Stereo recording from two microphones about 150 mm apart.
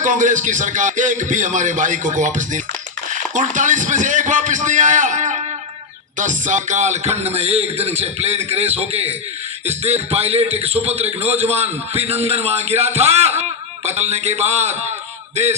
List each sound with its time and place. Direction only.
0.0 s a man's voice: 55° right (ahead or behind)